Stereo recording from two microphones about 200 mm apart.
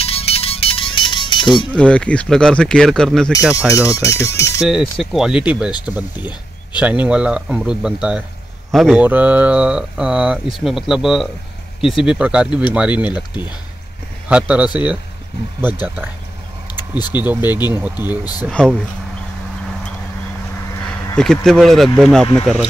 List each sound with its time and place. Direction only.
0.0 s music: 30° left (ahead or behind)
1.8 s speech: 5° left (ahead or behind)
3.6 s speech: 10° right (ahead or behind)
3.9 s speech: 15° left (ahead or behind)
4.6 s speech: centre (ahead or behind)
14.3 s speech: 5° right (ahead or behind)
18.5 s speech: 5° left (ahead or behind)
20.7 s a sound: 10° left (ahead or behind)
21.5 s speech: centre (ahead or behind)